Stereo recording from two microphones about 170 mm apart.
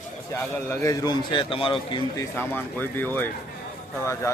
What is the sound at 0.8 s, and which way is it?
A man's voice, 20° left (ahead or behind).